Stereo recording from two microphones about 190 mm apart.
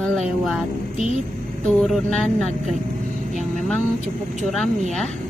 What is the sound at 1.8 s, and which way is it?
Speech, centre (ahead or behind).